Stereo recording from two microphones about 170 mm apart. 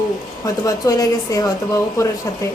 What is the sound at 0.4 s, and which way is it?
A woman's voice, 20° left (ahead or behind).